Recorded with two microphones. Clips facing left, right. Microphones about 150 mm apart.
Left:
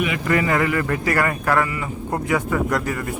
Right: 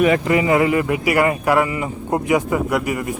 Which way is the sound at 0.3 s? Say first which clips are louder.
Right 4 dB; 20° right (ahead or behind).